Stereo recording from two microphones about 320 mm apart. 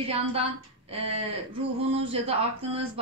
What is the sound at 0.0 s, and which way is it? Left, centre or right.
A woman's voice, centre.